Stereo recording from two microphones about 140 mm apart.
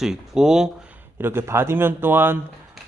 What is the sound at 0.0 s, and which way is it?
Speech, 5° right (ahead or behind).